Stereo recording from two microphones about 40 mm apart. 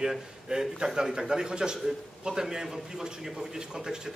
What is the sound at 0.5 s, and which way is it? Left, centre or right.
A man's voice, centre.